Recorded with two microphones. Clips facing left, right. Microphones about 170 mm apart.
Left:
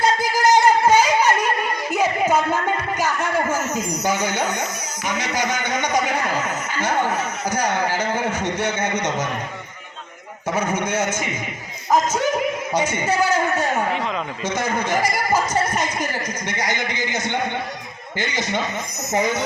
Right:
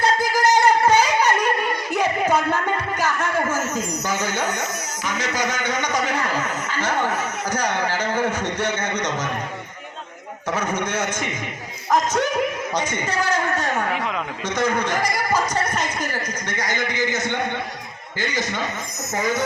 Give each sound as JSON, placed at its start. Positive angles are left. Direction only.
{"t": 0.0, "sound": "a sound", "side_deg": 10}
{"t": 1.9, "sound": "music", "side_deg": 5}
{"t": 3.0, "sound": "a sound", "side_deg": 10}
{"t": 4.0, "sound": "a man's voice", "side_deg": 15}
{"t": 10.5, "sound": "a man's voice", "side_deg": 10}
{"t": 18.2, "sound": "speech", "side_deg": 20}